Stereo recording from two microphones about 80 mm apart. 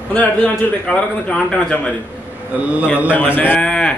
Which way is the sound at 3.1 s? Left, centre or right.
Left.